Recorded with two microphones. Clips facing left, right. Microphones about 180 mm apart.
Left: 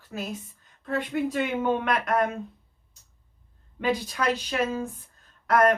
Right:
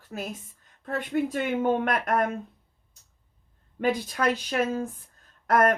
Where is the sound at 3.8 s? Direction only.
50° right (ahead or behind).